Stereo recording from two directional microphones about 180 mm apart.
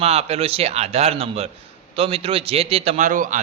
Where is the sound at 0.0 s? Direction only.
35° right (ahead or behind).